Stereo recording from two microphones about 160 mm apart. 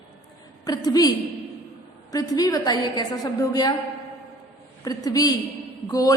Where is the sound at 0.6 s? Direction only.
25° left (ahead or behind).